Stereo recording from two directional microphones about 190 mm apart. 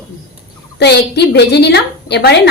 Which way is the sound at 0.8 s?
60° left (ahead or behind).